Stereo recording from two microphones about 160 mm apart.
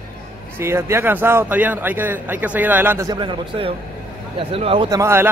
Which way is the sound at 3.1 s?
30° right (ahead or behind).